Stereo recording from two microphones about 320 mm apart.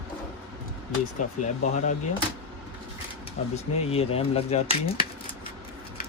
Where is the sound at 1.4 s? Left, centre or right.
Left.